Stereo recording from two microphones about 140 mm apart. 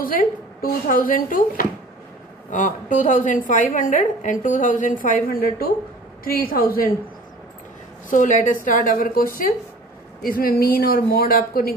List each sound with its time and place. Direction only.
0.0 s speech: 90° left
2.5 s a woman's voice: 65° left (ahead or behind); by 6.9 s 90° left
8.1 s a woman's voice: 65° left (ahead or behind); by 11.7 s 90° left